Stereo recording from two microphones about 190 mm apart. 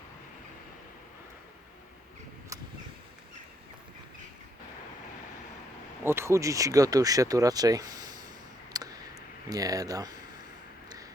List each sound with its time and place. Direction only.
6.0 s speech: 15° right (ahead or behind)
8.7 s clicking: 20° right (ahead or behind)
9.5 s speech: 20° right (ahead or behind)